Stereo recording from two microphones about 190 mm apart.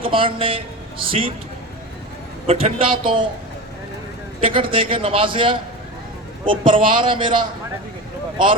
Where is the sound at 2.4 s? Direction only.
30° right (ahead or behind).